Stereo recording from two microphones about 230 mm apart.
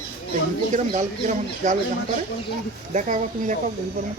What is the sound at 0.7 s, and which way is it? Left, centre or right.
Speech, right.